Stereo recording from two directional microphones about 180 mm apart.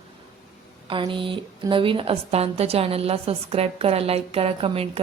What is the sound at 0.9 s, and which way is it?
A woman's voice, 25° right (ahead or behind).